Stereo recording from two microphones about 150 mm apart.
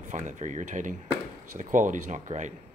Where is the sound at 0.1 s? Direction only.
50° right (ahead or behind).